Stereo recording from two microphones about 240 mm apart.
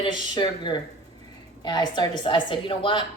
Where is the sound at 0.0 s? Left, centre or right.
Centre.